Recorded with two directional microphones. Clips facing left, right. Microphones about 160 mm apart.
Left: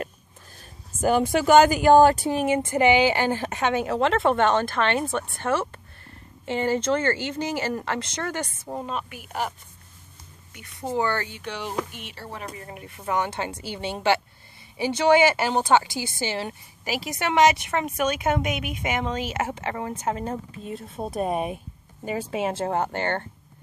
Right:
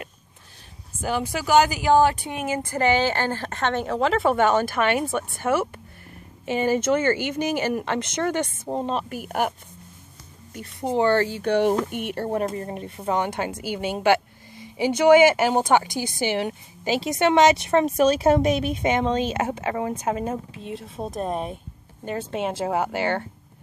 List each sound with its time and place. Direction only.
1.0 s speech: 50° left (ahead or behind); by 9.0 s 25° right (ahead or behind)
9.1 s speech: 50° right (ahead or behind)
10.8 s speech: 20° right (ahead or behind)
11.4 s speech: 55° right (ahead or behind); by 12.8 s 40° right (ahead or behind)
12.8 s speech: 20° right (ahead or behind)
20.5 s speech: centre (ahead or behind)